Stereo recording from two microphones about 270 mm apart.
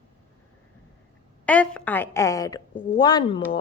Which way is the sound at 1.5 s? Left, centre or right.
Centre.